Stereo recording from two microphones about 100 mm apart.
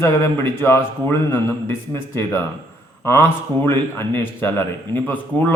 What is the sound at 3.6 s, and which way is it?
A man's voice, 25° left (ahead or behind).